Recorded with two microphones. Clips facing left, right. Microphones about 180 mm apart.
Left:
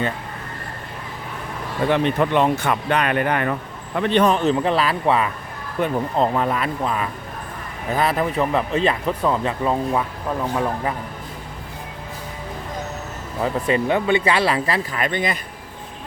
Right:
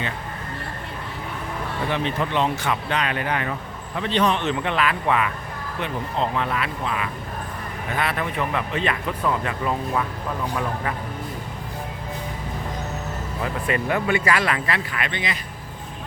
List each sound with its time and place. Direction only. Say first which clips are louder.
1.9 s speech: left 7 dB; 55° left (ahead or behind); by 10.0 s 25° left (ahead or behind)
13.4 s speech: left 5 dB; 25° left (ahead or behind); by 15.4 s 45° left (ahead or behind)